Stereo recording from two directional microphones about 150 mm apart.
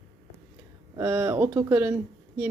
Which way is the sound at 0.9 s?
15° right (ahead or behind).